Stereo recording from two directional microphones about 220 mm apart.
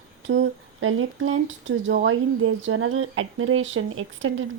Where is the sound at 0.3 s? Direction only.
60° right (ahead or behind).